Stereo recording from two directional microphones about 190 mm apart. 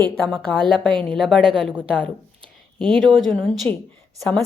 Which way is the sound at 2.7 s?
Centre (ahead or behind).